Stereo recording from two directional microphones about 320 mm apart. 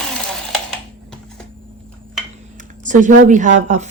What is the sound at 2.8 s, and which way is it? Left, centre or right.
Speech, right.